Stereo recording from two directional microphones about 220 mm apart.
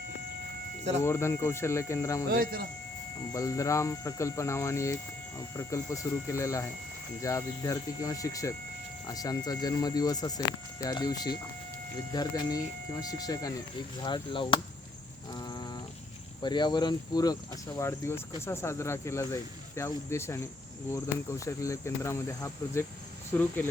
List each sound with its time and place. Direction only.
1.0 s speech: 10° left (ahead or behind)
2.3 s speech: 40° right (ahead or behind)
3.3 s speech: 15° left (ahead or behind)
15.3 s a sound: 20° left (ahead or behind)
16.4 s speech: 20° left (ahead or behind)